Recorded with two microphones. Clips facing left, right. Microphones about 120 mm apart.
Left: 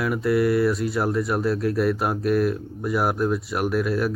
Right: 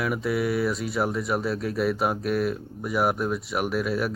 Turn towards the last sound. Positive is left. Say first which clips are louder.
# left 3 dB
turn(degrees=0)  # may be behind; listen again after turning